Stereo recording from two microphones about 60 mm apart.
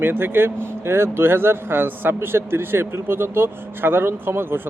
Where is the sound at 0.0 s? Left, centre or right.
Right.